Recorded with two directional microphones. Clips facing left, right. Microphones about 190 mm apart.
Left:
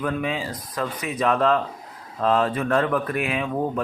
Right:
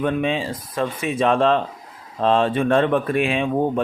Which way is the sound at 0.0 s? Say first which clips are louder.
Right 4 dB; 25° right (ahead or behind).